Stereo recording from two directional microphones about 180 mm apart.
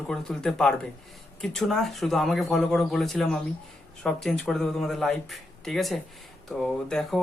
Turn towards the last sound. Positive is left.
turn(degrees=0)  # may be behind; listen again after turning